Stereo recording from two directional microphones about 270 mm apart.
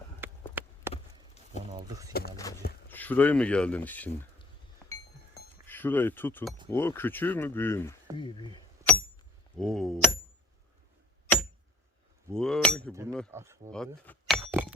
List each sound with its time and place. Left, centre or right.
0.2 s run: centre
1.7 s speech: centre
2.3 s speech: centre
4.9 s a sound: centre
6.7 s speech: centre
8.8 s a sound: centre
9.6 s speech: centre
12.3 s speech: centre
12.9 s speech: centre
13.7 s a sound: centre